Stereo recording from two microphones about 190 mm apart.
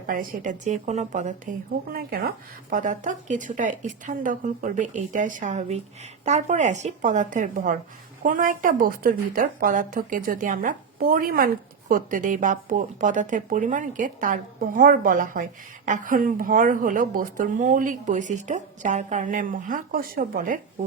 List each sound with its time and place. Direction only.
0.1 s a woman's voice: 45° right (ahead or behind)